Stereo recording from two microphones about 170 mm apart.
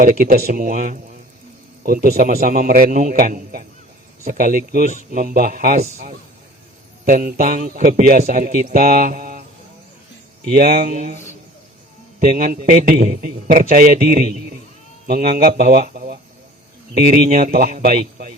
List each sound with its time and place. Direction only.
0.0 s a man's voice: 55° right (ahead or behind)
5.7 s a man's voice: 40° right (ahead or behind)
7.0 s a man's voice: 55° right (ahead or behind)
10.6 s a man's voice: 60° right (ahead or behind)
12.4 s a man's voice: 55° right (ahead or behind)
17.2 s a man's voice: 55° right (ahead or behind)